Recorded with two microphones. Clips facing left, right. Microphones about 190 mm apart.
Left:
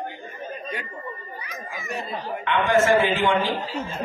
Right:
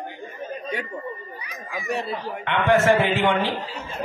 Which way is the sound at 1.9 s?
70° right (ahead or behind).